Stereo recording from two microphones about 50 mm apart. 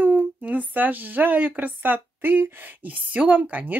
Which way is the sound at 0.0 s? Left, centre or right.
Right.